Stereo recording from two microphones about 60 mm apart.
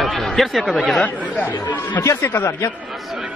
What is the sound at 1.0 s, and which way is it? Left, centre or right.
Speech, left.